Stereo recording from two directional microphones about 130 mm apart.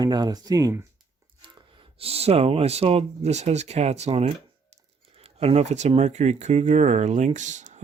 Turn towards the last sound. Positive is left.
turn(degrees=-70)  # may be behind; listen again after turning